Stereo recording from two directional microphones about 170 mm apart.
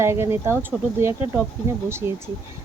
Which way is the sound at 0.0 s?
15° right (ahead or behind).